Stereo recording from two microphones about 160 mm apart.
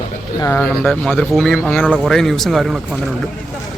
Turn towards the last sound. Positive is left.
turn(degrees=-5)  # may be behind; listen again after turning